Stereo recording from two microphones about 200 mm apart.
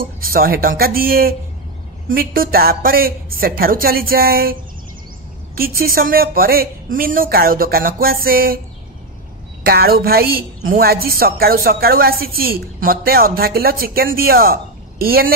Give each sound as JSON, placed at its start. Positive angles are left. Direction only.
{"t": 0.2, "sound": "a woman's voice", "side_deg": -45}
{"t": 5.6, "sound": "a woman's voice", "side_deg": -45}
{"t": 9.6, "sound": "a woman's voice", "side_deg": -50}